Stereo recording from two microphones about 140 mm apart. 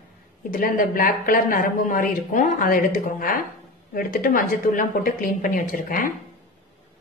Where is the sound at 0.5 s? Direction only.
80° left.